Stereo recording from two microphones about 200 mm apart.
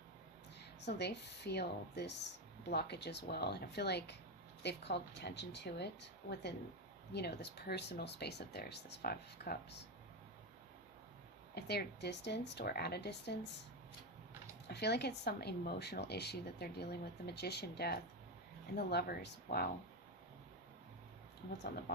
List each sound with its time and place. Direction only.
0.8 s speech: 55° left (ahead or behind)
11.5 s speech: 55° left (ahead or behind)
14.7 s speech: 55° left (ahead or behind)
21.9 s music: 55° left (ahead or behind)